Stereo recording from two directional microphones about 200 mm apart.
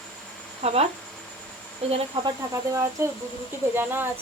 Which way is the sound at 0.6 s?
30° right (ahead or behind).